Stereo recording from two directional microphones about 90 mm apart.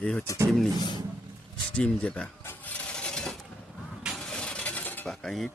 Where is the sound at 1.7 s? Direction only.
15° left (ahead or behind).